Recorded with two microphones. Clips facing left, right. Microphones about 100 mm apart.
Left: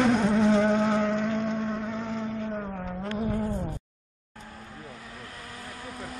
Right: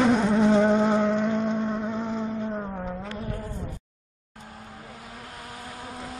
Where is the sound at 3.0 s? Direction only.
20° left (ahead or behind).